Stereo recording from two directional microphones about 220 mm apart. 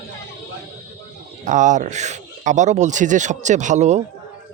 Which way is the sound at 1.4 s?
35° right (ahead or behind).